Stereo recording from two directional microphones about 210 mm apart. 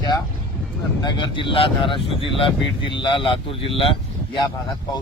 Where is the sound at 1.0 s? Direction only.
20° left (ahead or behind).